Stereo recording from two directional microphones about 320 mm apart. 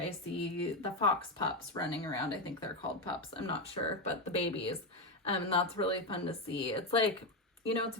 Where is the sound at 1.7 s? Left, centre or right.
Centre.